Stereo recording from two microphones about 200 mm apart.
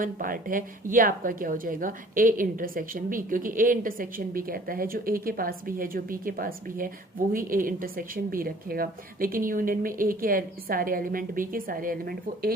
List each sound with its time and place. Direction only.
0.0 s speech: 45° right (ahead or behind)